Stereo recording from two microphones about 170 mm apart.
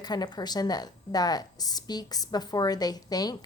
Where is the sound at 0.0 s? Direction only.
25° left (ahead or behind).